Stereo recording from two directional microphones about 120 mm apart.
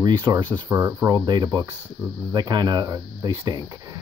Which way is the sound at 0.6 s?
25° right (ahead or behind).